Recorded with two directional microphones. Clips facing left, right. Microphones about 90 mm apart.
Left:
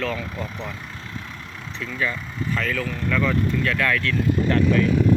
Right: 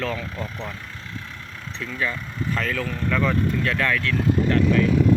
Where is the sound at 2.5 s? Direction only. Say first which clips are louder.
Left 1 dB; 30° right (ahead or behind).